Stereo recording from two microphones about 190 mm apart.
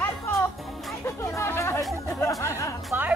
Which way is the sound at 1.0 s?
15° left (ahead or behind).